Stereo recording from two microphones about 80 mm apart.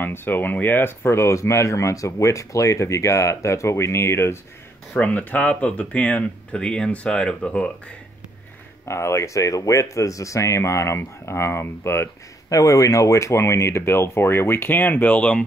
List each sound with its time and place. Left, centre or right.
0.0 s speech: left
4.9 s speech: centre
8.8 s speech: left; by 15.4 s centre